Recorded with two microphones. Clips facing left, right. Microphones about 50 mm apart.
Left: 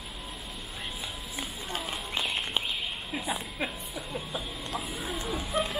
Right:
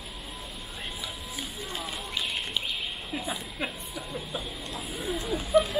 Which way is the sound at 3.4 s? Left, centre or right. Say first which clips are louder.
Even; centre.